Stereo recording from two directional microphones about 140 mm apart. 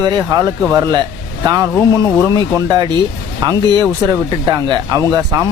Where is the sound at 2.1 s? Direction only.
25° right (ahead or behind).